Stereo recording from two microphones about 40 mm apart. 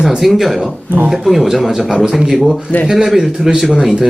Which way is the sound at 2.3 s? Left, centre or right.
Centre.